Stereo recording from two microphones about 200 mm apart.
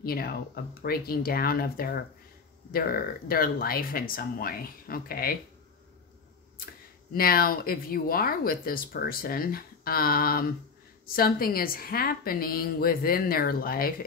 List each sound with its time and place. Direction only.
0.0 s speech: 50° left (ahead or behind)
6.6 s speech: 45° left (ahead or behind)